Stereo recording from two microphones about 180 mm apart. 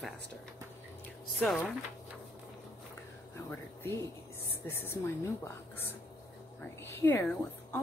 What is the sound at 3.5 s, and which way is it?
Speech, 10° left (ahead or behind).